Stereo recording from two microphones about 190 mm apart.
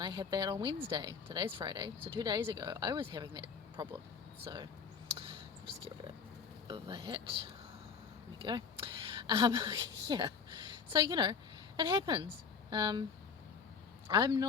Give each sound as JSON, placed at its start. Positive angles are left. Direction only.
{"t": 0.0, "sound": "speech", "side_deg": -20}
{"t": 5.1, "sound": "a sound", "side_deg": -30}
{"t": 6.7, "sound": "a woman's voice", "side_deg": -25}
{"t": 14.1, "sound": "speech", "side_deg": -20}